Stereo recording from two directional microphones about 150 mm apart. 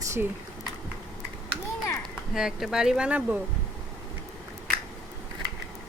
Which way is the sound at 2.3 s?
5° right (ahead or behind).